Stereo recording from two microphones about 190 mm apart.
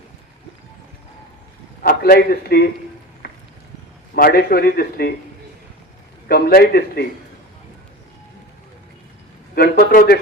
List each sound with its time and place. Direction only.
1.8 s a man's voice: 50° left (ahead or behind)
4.1 s a man's voice: 55° left (ahead or behind)
6.2 s a man's voice: 55° left (ahead or behind)
9.6 s a man's voice: 55° left (ahead or behind)